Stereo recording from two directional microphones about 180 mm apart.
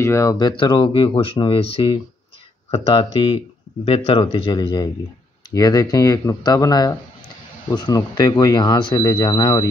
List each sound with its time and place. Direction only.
0.0 s speech: 15° left (ahead or behind)